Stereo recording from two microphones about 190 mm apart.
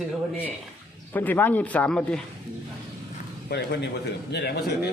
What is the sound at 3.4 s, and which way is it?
A man's voice, 65° left (ahead or behind).